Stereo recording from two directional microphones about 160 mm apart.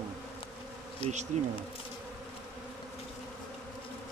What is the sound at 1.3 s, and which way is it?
Bee, 45° right (ahead or behind).